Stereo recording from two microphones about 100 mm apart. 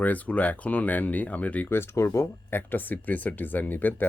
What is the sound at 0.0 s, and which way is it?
Speech, 15° left (ahead or behind).